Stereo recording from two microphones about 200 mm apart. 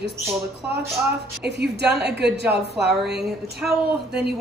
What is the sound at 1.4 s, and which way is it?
A woman's voice, 55° right (ahead or behind).